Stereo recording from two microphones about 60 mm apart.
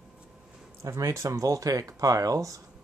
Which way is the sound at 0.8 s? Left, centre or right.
Right.